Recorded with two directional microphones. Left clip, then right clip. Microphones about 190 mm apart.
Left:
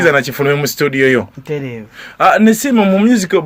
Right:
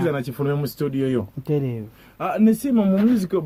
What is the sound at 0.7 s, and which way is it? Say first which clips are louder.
Speech: left 12 dB; 15° left (ahead or behind).